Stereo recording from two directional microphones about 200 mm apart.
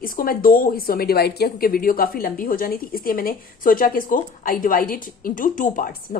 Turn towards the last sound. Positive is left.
turn(degrees=40)  # may be behind; listen again after turning